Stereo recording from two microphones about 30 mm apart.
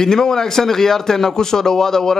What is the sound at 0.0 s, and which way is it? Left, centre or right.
Speech, centre.